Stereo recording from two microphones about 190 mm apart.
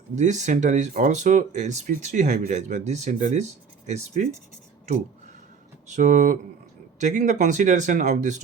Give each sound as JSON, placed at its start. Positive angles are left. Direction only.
{"t": 0.2, "sound": "speech", "side_deg": -40}
{"t": 5.9, "sound": "speech", "side_deg": -40}